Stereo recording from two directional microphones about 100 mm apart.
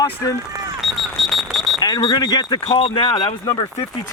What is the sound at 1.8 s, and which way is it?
Speech, 40° left (ahead or behind).